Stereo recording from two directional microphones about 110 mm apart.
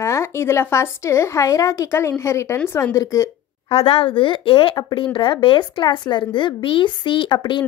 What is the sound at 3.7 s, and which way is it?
Speech, 60° left (ahead or behind).